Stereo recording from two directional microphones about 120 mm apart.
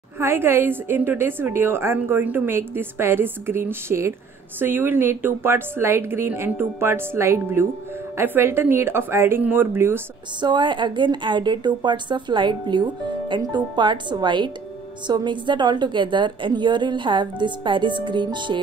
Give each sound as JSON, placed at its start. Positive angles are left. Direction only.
{"t": 0.2, "sound": "a woman's voice", "side_deg": -20}
{"t": 10.4, "sound": "a woman's voice", "side_deg": -40}